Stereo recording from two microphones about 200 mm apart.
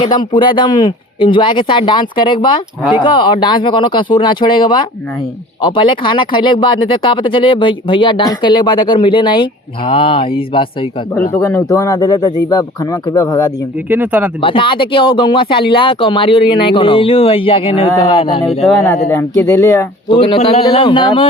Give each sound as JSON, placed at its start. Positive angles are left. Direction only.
{"t": 0.0, "sound": "speech", "side_deg": 20}
{"t": 11.1, "sound": "speech", "side_deg": 15}
{"t": 13.9, "sound": "speech", "side_deg": -10}
{"t": 14.4, "sound": "speech", "side_deg": 25}
{"t": 19.1, "sound": "speech", "side_deg": 15}
{"t": 20.1, "sound": "speech", "side_deg": 25}